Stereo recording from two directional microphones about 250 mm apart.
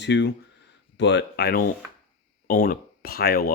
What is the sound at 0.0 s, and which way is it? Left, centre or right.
Speech, left.